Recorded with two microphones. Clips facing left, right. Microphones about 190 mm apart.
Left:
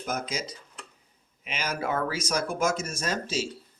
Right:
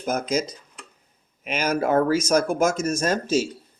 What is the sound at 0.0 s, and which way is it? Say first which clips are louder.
Speech: right 8 dB; 45° right (ahead or behind).